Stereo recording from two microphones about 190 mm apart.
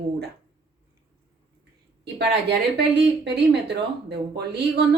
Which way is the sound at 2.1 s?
60° right (ahead or behind).